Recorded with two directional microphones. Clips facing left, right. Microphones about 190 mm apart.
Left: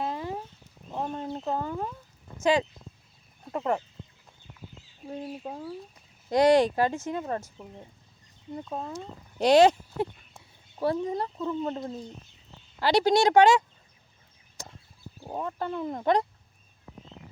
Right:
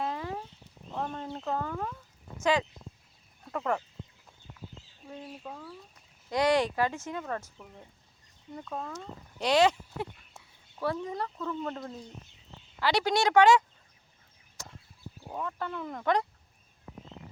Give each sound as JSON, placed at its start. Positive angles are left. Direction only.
{"t": 0.0, "sound": "a sound", "side_deg": 20}
{"t": 1.5, "sound": "speech", "side_deg": 20}
{"t": 5.0, "sound": "speech", "side_deg": 35}
{"t": 9.4, "sound": "speech", "side_deg": 45}
{"t": 10.8, "sound": "speech", "side_deg": 30}
{"t": 15.2, "sound": "speech", "side_deg": 30}